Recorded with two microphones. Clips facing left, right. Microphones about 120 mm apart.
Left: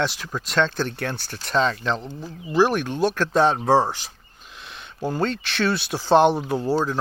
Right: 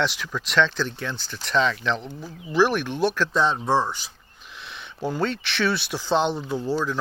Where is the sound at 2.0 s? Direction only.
Centre (ahead or behind).